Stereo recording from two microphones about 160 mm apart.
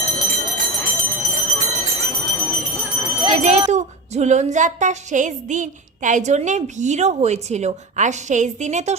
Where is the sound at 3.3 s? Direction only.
45° right (ahead or behind).